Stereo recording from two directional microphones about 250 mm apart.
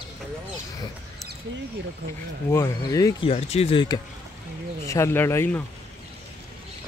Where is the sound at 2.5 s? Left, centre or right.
Centre.